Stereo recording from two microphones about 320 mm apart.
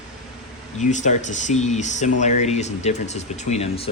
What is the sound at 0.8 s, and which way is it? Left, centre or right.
A man's voice, left.